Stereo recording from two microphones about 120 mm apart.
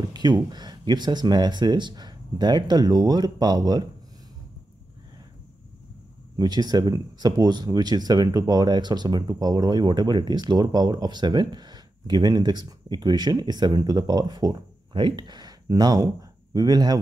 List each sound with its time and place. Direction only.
0.1 s speech: 35° right (ahead or behind)
6.3 s speech: 35° right (ahead or behind)